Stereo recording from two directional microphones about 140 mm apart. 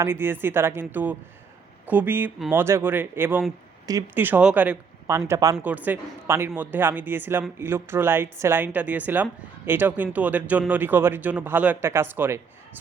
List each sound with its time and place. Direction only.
0.0 s speech: 15° right (ahead or behind)
5.6 s speech: 10° right (ahead or behind)